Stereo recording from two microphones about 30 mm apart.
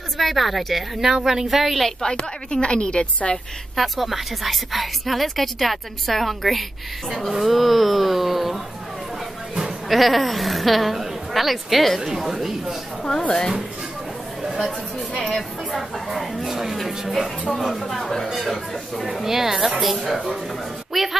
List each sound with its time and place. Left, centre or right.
0.2 s a woman's voice: centre
1.1 s speech: centre
2.0 s a woman's voice: left
3.7 s a woman's voice: centre
9.8 s a woman's voice: centre
15.1 s a woman's voice: left
15.7 s a woman's voice: centre
17.5 s speech: centre
19.2 s speech: centre
19.8 s a woman's voice: centre